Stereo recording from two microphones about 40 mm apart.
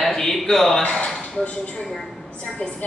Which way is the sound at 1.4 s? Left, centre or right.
Left.